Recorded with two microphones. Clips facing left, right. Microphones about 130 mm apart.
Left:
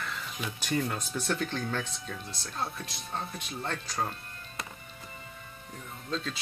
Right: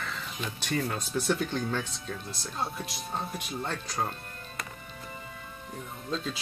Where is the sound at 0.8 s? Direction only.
5° right (ahead or behind).